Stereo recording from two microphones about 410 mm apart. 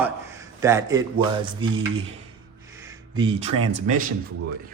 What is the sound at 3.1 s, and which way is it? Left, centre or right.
Speech, centre.